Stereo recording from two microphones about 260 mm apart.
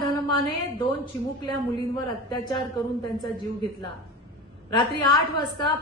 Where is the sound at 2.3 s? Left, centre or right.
Centre.